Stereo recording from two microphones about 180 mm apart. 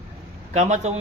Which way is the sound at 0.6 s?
40° right (ahead or behind).